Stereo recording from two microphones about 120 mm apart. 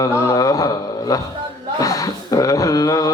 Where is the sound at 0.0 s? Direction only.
30° left (ahead or behind).